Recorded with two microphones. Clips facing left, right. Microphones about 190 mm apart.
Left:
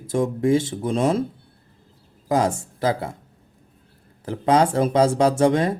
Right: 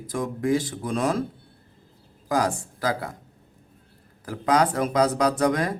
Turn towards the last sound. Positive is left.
turn(degrees=25)  # may be behind; listen again after turning